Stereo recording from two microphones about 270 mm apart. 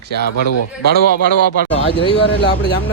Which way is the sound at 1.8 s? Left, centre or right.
Left.